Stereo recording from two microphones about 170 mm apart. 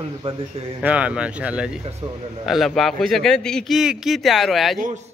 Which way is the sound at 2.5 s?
Centre (ahead or behind).